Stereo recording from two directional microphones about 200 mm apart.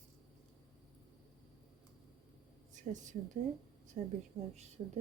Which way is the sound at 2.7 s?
35° right (ahead or behind).